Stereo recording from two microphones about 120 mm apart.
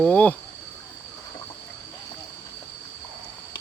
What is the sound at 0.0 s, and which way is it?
Speech, 10° left (ahead or behind).